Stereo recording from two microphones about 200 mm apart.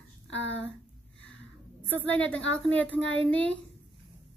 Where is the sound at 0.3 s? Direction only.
65° left (ahead or behind).